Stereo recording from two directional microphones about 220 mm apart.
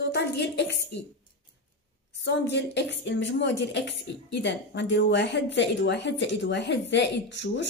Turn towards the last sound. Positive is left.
turn(degrees=55)  # may be behind; listen again after turning